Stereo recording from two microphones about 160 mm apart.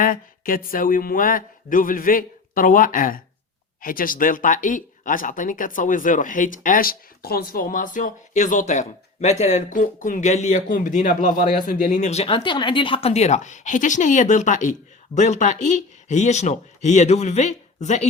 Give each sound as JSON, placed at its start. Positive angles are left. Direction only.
{"t": 0.0, "sound": "speech", "side_deg": 60}